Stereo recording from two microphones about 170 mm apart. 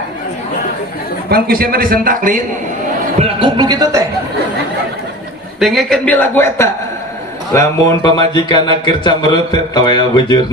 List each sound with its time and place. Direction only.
1.3 s speech: 65° right (ahead or behind)
3.2 s a man's voice: 30° right (ahead or behind)
5.5 s a man's voice: centre (ahead or behind); by 10.4 s 25° left (ahead or behind)